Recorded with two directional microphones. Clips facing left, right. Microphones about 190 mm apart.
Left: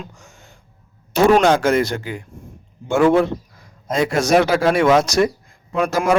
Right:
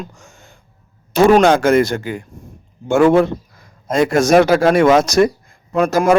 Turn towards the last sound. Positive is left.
turn(degrees=-45)  # may be behind; listen again after turning